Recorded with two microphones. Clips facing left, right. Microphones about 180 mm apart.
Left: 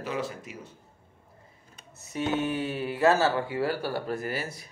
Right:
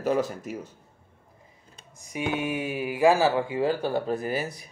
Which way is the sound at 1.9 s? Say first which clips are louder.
Left 1 dB; 15° right (ahead or behind).